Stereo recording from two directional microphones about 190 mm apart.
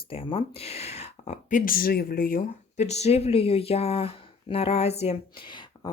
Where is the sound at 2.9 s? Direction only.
35° left (ahead or behind).